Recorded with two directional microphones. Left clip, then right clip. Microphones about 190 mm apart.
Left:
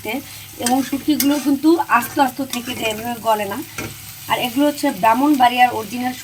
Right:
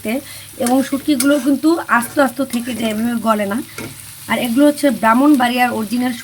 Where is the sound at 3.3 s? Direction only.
35° right (ahead or behind).